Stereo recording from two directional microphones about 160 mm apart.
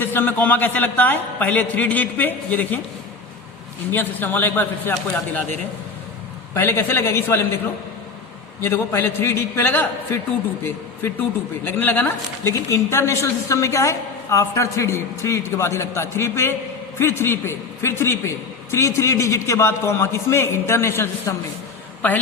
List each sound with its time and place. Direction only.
0.0 s a woman's voice: 10° left (ahead or behind)
3.9 s a woman's voice: 10° left (ahead or behind)
6.5 s a woman's voice: 15° left (ahead or behind)
8.6 s a woman's voice: 15° left (ahead or behind)